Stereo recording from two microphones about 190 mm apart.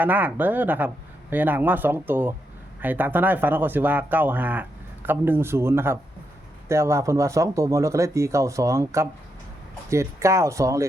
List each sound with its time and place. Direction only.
0.0 s speech: 10° right (ahead or behind)